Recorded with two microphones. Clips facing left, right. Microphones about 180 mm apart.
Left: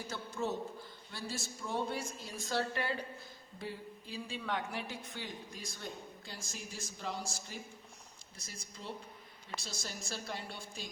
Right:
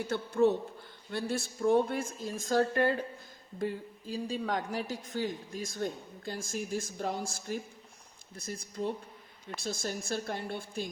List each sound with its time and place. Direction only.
0.0 s a woman's voice: 60° right (ahead or behind)